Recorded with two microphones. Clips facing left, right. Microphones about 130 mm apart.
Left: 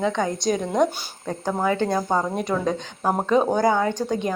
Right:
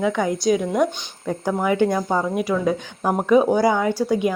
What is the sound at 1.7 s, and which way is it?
A woman's voice, 15° right (ahead or behind).